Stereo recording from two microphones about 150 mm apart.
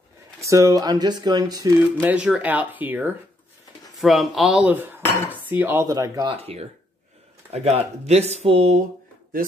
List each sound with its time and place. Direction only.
0.4 s speech: 20° right (ahead or behind)
1.8 s cutlery: 10° right (ahead or behind)
4.0 s cutlery: centre (ahead or behind); by 6.3 s 25° right (ahead or behind)
6.3 s speech: 40° right (ahead or behind)